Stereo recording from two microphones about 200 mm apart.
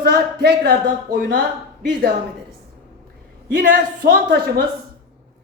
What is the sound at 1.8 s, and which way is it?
Speech, 50° right (ahead or behind).